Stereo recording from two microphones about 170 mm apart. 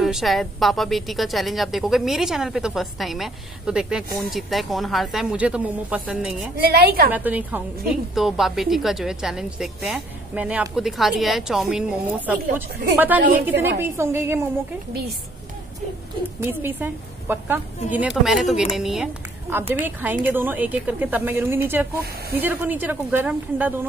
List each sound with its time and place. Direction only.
0.0 s a woman's voice: centre (ahead or behind)
6.6 s a woman's voice: 65° right (ahead or behind)
7.1 s a woman's voice: 10° right (ahead or behind)
16.3 s a woman's voice: 10° right (ahead or behind)